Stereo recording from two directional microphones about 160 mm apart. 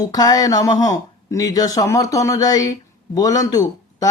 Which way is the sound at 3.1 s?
20° left (ahead or behind).